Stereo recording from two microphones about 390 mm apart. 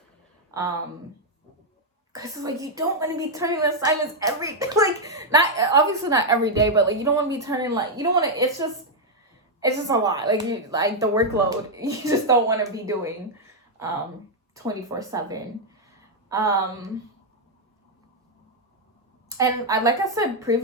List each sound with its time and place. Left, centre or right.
2.1 s a woman's voice: centre
19.4 s a woman's voice: centre